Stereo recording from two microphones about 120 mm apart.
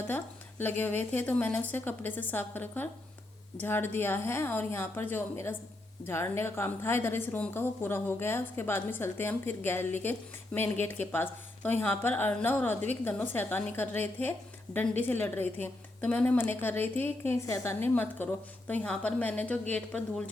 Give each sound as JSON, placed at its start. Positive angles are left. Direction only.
{"t": 0.8, "sound": "a woman's voice", "side_deg": 15}